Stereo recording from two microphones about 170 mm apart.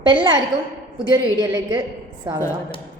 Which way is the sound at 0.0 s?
30° right (ahead or behind).